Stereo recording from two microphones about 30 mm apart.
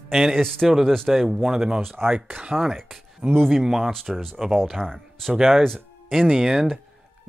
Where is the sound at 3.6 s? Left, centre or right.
Centre.